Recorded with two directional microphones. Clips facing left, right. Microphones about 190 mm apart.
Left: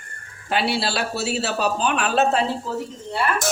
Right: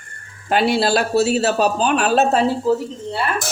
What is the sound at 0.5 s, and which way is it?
Speech, 45° right (ahead or behind).